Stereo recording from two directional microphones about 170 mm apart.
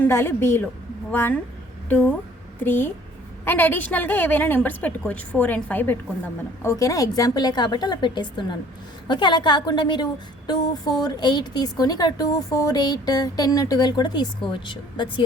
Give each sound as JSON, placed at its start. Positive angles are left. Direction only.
{"t": 0.0, "sound": "a woman's voice", "side_deg": 15}